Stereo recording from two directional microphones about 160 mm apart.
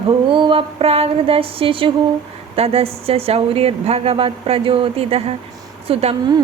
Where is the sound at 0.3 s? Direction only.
30° right (ahead or behind).